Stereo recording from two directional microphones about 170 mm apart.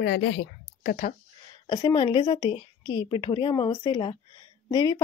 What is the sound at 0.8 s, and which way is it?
Speech, 55° left (ahead or behind).